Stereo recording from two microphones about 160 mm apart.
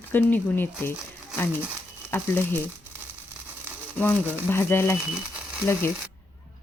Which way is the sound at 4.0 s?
10° left (ahead or behind).